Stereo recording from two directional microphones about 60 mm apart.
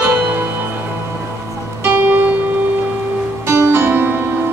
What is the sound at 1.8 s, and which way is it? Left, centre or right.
Music, right.